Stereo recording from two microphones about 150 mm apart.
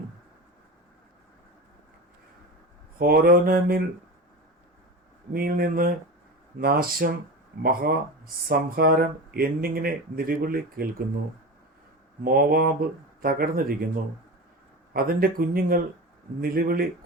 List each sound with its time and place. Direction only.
3.0 s speech: 80° right
5.3 s speech: 80° right
12.2 s speech: 80° right
14.9 s speech: 80° right